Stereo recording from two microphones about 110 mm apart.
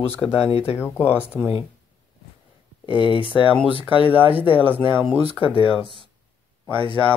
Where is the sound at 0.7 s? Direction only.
20° left (ahead or behind).